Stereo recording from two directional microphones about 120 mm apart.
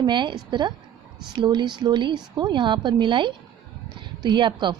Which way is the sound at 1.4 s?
40° right (ahead or behind).